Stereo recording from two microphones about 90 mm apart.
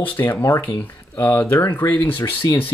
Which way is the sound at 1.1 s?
25° left (ahead or behind).